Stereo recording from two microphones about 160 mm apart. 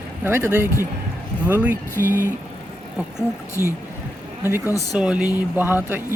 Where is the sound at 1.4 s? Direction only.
10° right (ahead or behind).